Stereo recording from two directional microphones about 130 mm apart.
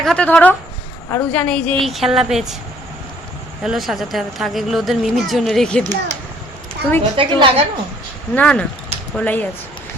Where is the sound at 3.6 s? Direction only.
5° right (ahead or behind).